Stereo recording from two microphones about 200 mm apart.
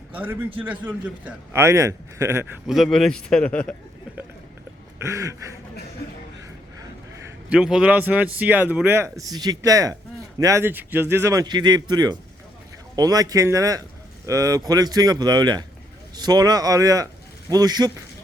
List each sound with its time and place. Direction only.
0.1 s a man's voice: 10° right (ahead or behind)
2.6 s speech: centre (ahead or behind)
4.9 s a man's voice: 15° right (ahead or behind)
7.5 s a man's voice: 5° right (ahead or behind); by 17.9 s 20° right (ahead or behind)